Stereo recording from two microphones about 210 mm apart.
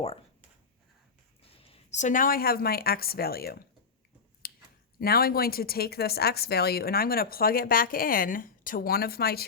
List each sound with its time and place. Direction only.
1.4 s a woman's voice: 30° left (ahead or behind); by 3.7 s 45° left (ahead or behind)
4.4 s a sound: 45° left (ahead or behind)
4.9 s speech: 45° left (ahead or behind)